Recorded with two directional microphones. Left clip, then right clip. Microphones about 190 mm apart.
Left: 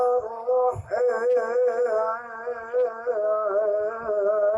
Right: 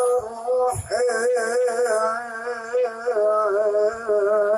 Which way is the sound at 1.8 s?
45° right (ahead or behind).